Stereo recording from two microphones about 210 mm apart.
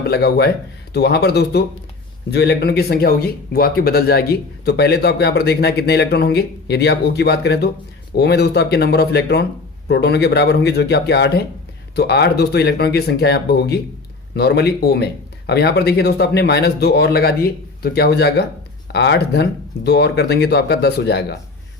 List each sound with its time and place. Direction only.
0.1 s speech: 50° left (ahead or behind)